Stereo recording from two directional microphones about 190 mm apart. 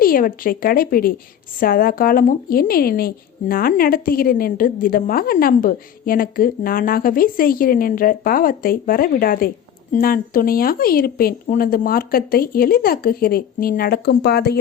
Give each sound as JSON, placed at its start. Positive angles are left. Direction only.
{"t": 0.0, "sound": "a woman's voice", "side_deg": 50}